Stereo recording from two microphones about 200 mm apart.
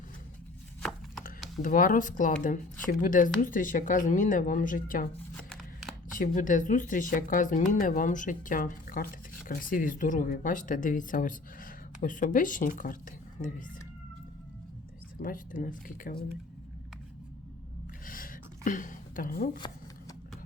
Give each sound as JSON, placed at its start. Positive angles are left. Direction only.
{"t": 0.8, "sound": "chopping", "side_deg": 0}
{"t": 1.6, "sound": "speech", "side_deg": 40}
{"t": 6.1, "sound": "speech", "side_deg": 40}
{"t": 15.2, "sound": "speech", "side_deg": 45}
{"t": 18.0, "sound": "a sound", "side_deg": 45}